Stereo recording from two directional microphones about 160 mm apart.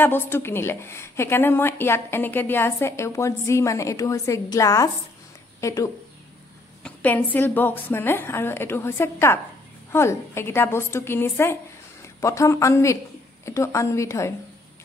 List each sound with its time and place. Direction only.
0.0 s a woman's voice: 15° left (ahead or behind)